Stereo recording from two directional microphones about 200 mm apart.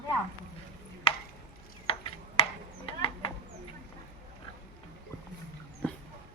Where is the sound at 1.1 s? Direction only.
30° left (ahead or behind).